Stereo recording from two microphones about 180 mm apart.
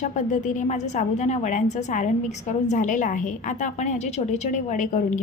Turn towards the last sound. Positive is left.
turn(degrees=45)  # may be behind; listen again after turning